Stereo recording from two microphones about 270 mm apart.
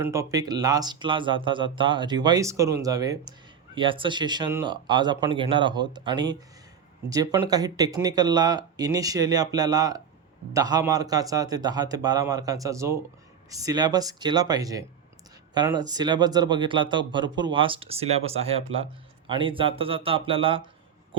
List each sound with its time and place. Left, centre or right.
0.0 s speech: centre